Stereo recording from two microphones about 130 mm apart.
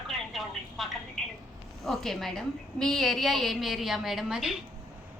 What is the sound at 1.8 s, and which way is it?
A woman's voice, centre (ahead or behind).